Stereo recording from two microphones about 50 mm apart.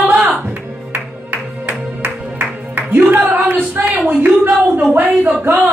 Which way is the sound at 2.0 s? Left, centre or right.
Right.